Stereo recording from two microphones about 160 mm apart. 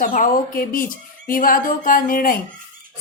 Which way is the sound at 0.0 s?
55° left (ahead or behind).